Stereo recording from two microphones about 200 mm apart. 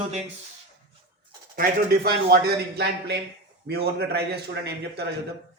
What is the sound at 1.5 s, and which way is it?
Speech, 45° right (ahead or behind).